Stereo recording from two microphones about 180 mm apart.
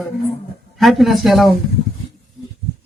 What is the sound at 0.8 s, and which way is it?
Speech, centre (ahead or behind).